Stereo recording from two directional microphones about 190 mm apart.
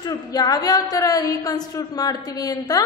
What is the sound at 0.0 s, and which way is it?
A woman's voice, 20° left (ahead or behind).